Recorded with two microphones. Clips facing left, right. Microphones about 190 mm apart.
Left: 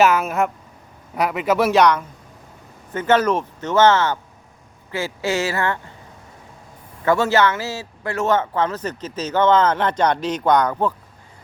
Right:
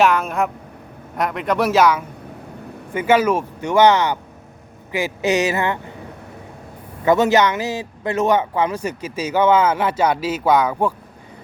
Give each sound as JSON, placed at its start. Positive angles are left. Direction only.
{"t": 0.0, "sound": "speech", "side_deg": 5}
{"t": 7.0, "sound": "speech", "side_deg": -15}